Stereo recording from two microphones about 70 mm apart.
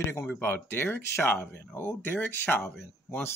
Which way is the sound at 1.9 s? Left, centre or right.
Left.